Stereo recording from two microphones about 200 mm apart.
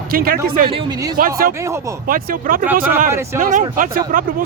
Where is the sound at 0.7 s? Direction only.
25° right (ahead or behind).